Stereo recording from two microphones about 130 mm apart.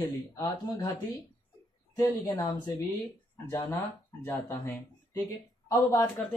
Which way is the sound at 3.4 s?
15° left (ahead or behind).